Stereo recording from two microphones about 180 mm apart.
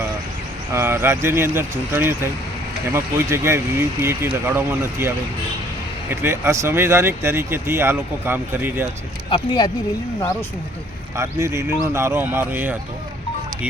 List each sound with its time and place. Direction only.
0.7 s speech: 15° right (ahead or behind)
9.3 s speech: 25° left (ahead or behind)
11.2 s speech: 15° right (ahead or behind)